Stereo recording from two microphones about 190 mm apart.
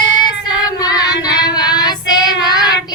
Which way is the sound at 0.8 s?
20° left (ahead or behind).